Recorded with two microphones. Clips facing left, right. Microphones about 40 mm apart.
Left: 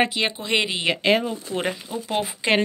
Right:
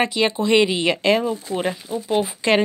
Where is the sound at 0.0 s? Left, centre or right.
Centre.